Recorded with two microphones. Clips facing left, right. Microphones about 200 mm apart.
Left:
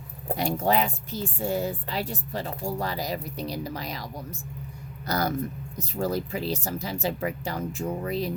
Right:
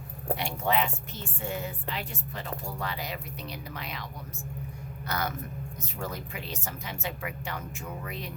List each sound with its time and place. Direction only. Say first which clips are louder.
0.3 s a woman's voice: left 6 dB; 40° left (ahead or behind)